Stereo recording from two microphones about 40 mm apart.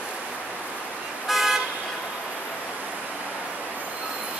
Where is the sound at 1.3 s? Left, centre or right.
Centre.